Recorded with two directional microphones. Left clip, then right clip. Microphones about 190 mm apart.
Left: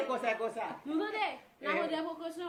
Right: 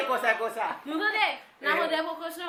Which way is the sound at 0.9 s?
20° right (ahead or behind).